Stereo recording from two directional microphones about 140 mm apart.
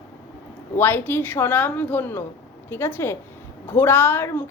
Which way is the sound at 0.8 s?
15° left (ahead or behind).